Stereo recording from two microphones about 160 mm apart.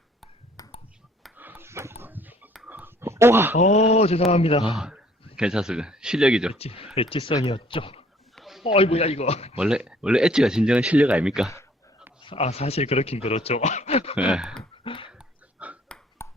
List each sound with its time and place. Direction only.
0.6 s finger snapping: 20° left (ahead or behind)
1.4 s dog: 10° right (ahead or behind)
2.6 s a sound: 10° right (ahead or behind)
3.6 s speech: 45° left (ahead or behind)
4.7 s speech: 5° right (ahead or behind)
6.5 s speech: 40° left (ahead or behind)
8.4 s a sound: centre (ahead or behind)
8.6 s speech: 35° left (ahead or behind)
9.6 s speech: 5° right (ahead or behind)
12.2 s speech: 40° left (ahead or behind)
14.2 s speech: 5° right (ahead or behind)
14.8 s a sound: 30° left (ahead or behind)
15.2 s a sound: 10° right (ahead or behind)
16.2 s ping: 15° left (ahead or behind)